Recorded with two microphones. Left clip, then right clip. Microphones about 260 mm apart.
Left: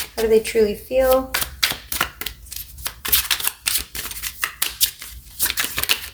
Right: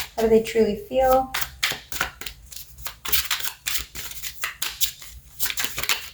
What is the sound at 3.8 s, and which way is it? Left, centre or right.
Scissors, left.